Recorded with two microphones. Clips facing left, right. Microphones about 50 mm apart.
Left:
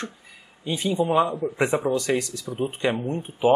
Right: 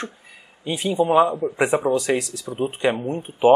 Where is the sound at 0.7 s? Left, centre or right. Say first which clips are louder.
Right 3 dB; right.